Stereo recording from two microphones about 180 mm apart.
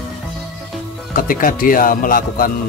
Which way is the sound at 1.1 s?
50° left (ahead or behind).